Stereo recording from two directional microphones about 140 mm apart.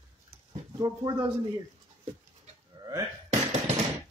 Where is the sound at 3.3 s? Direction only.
50° right (ahead or behind).